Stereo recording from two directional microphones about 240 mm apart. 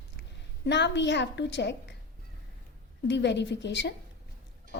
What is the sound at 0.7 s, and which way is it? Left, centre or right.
A woman's voice, left.